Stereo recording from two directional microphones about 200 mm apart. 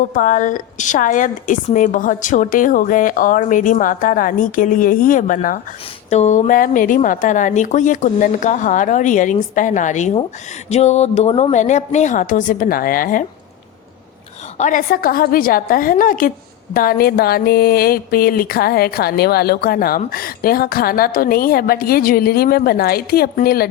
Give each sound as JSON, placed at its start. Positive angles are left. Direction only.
{"t": 0.1, "sound": "a woman's voice", "side_deg": 40}
{"t": 14.6, "sound": "a woman's voice", "side_deg": 40}